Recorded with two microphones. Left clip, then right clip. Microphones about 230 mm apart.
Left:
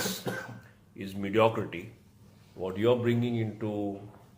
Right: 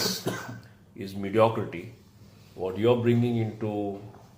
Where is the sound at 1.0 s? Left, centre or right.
Left.